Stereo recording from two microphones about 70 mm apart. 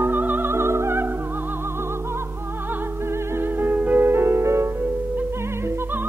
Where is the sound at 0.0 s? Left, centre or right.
Right.